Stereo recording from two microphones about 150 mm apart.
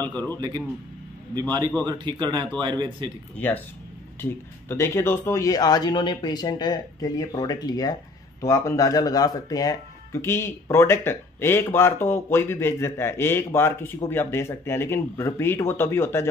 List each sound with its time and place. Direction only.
0.1 s speech: 15° left (ahead or behind)
1.9 s a man's voice: 30° right (ahead or behind)
3.3 s speech: 10° left (ahead or behind)